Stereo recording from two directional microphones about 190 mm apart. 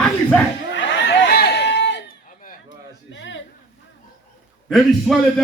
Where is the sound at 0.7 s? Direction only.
60° left (ahead or behind).